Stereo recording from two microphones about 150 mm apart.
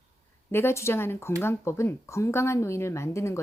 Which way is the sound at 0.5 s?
15° left (ahead or behind).